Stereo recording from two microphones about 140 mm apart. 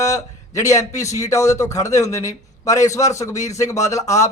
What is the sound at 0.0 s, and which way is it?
A man's voice, 20° left (ahead or behind).